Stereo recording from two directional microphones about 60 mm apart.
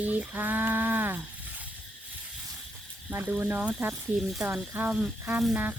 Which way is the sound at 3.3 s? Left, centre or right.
Right.